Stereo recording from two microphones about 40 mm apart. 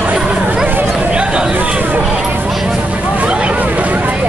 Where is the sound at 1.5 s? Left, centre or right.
Right.